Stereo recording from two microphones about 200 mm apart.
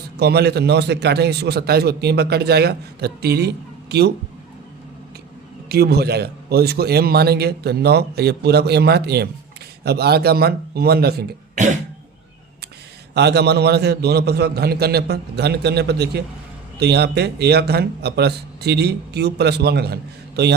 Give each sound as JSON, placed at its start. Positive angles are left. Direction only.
{"t": 0.2, "sound": "a man's voice", "side_deg": -55}
{"t": 5.6, "sound": "a man's voice", "side_deg": -55}
{"t": 13.1, "sound": "a man's voice", "side_deg": -55}